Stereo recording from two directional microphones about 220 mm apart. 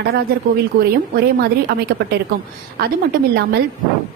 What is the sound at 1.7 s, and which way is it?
Speech, 45° right (ahead or behind).